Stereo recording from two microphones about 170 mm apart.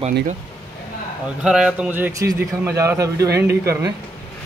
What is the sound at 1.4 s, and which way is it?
A man's voice, 5° right (ahead or behind).